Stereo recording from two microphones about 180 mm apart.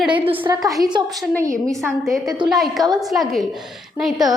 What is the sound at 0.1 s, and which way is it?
Speech, 30° right (ahead or behind).